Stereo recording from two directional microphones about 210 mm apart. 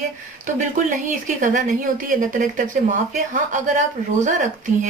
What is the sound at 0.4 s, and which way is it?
Speech, 35° right (ahead or behind).